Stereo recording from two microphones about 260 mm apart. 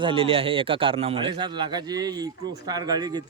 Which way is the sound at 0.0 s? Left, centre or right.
Right.